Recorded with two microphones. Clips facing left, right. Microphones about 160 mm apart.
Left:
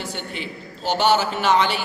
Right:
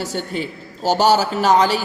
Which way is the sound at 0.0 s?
40° right (ahead or behind).